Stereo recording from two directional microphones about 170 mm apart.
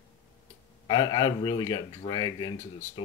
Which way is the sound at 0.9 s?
25° left (ahead or behind).